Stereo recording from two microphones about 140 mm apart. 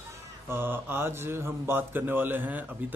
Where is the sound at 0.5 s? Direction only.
15° right (ahead or behind).